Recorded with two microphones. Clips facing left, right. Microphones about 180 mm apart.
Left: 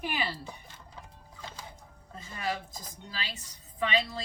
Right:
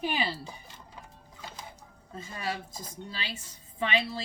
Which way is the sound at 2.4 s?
25° right (ahead or behind).